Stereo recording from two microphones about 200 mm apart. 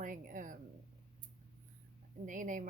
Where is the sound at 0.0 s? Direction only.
40° right (ahead or behind).